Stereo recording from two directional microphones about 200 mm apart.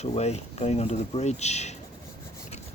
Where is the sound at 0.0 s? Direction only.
30° left (ahead or behind).